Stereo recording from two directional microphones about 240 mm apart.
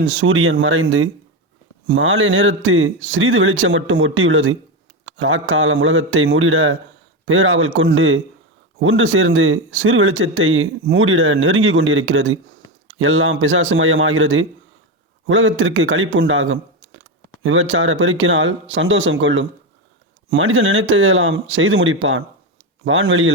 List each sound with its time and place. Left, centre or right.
0.0 s speech: right